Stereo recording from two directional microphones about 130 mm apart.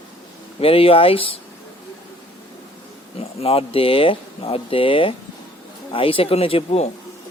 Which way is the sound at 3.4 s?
50° left (ahead or behind).